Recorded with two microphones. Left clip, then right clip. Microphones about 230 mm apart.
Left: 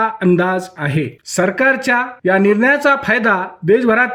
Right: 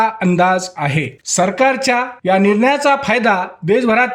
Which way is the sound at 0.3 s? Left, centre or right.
Centre.